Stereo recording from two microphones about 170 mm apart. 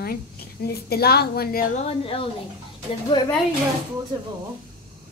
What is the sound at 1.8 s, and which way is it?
Speech, 35° left (ahead or behind).